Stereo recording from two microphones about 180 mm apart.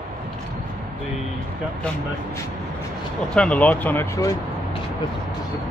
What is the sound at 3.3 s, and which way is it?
Speech, 5° left (ahead or behind).